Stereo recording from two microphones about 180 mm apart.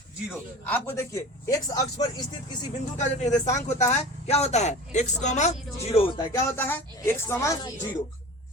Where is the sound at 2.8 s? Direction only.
40° left (ahead or behind).